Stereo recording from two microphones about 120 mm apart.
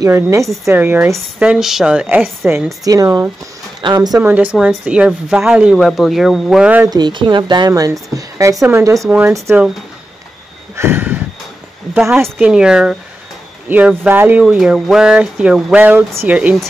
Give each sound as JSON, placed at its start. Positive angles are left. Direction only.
{"t": 0.0, "sound": "a woman's voice", "side_deg": -25}
{"t": 1.4, "sound": "speech", "side_deg": -5}
{"t": 2.8, "sound": "speech", "side_deg": -30}
{"t": 4.2, "sound": "speech", "side_deg": -15}
{"t": 6.9, "sound": "a woman's voice", "side_deg": -40}
{"t": 10.8, "sound": "a sound", "side_deg": -20}
{"t": 11.9, "sound": "speech", "side_deg": -10}
{"t": 14.6, "sound": "speech", "side_deg": -5}